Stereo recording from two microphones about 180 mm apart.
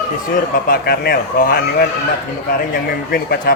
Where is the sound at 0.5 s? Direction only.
55° left (ahead or behind).